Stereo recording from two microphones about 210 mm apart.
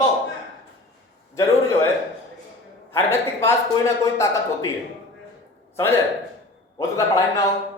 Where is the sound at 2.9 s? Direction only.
10° left (ahead or behind).